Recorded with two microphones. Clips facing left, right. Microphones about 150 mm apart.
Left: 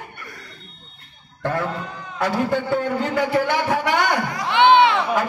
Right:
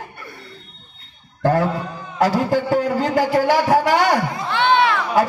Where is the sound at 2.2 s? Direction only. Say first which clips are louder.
Right 4 dB; 40° right (ahead or behind).